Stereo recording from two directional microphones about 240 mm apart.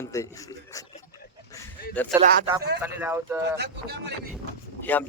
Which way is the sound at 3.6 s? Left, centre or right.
Right.